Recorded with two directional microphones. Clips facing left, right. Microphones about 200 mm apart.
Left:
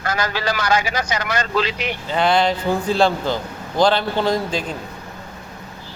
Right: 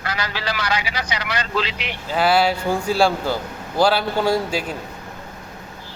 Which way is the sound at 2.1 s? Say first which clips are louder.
Even; 5° right (ahead or behind).